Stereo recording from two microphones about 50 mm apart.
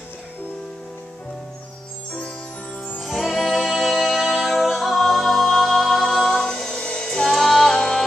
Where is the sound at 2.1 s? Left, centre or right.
Centre.